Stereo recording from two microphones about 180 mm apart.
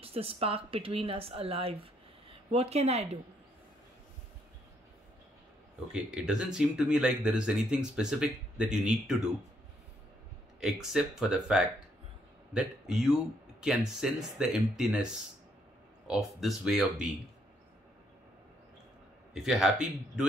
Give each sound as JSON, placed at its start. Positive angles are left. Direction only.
{"t": 0.0, "sound": "speech", "side_deg": -30}
{"t": 5.9, "sound": "speech", "side_deg": -5}
{"t": 10.6, "sound": "speech", "side_deg": 0}
{"t": 16.1, "sound": "speech", "side_deg": 0}
{"t": 19.3, "sound": "speech", "side_deg": 0}